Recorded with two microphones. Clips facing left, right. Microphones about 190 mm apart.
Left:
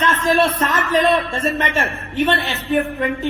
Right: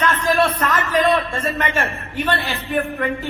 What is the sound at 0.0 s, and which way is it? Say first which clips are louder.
Speech: left 1 dB; 25° left (ahead or behind).